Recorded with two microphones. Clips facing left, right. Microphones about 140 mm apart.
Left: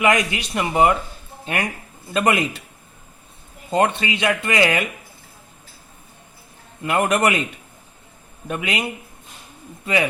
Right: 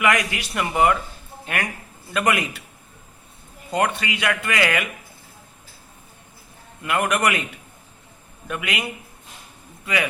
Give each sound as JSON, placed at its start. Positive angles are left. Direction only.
{"t": 0.0, "sound": "speech", "side_deg": 25}
{"t": 3.7, "sound": "speech", "side_deg": 25}
{"t": 6.8, "sound": "speech", "side_deg": 30}
{"t": 8.4, "sound": "a man's voice", "side_deg": 25}